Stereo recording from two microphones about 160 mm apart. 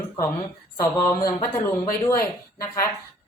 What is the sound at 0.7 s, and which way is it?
Speech, 20° left (ahead or behind).